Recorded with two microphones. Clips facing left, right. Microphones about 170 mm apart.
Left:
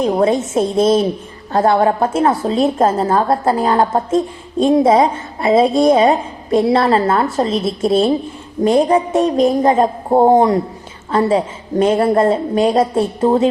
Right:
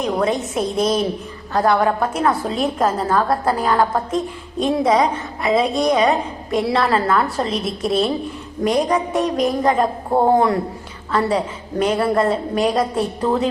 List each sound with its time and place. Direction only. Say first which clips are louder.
0.0 s a woman's voice: left 5 dB; 30° left (ahead or behind)